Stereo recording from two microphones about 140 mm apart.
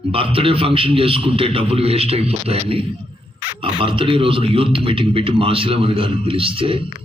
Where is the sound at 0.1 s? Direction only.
40° right (ahead or behind).